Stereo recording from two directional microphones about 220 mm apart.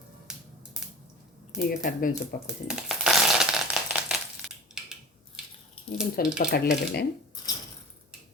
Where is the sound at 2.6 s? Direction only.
Centre (ahead or behind).